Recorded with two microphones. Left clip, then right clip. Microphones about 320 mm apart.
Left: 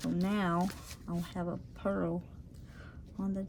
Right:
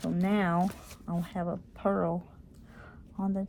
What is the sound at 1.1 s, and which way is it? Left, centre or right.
Speech, centre.